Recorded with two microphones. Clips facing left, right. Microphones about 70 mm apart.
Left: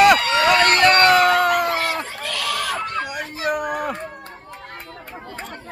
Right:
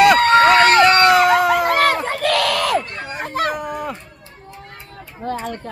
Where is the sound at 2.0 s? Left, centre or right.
Right.